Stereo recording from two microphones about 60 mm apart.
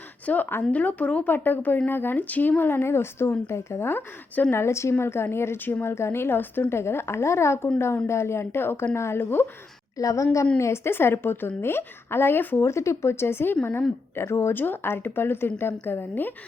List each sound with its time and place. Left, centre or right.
0.3 s a woman's voice: left
4.5 s a woman's voice: left
10.0 s a woman's voice: left
10.6 s a woman's voice: left
12.6 s speech: left
14.6 s a woman's voice: left